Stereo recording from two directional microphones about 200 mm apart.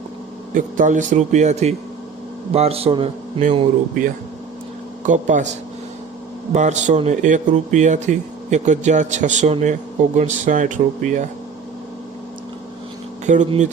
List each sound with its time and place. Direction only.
0.5 s a man's voice: 40° right (ahead or behind)
5.0 s speech: 40° right (ahead or behind)
6.5 s speech: 35° right (ahead or behind)
13.2 s speech: 35° right (ahead or behind)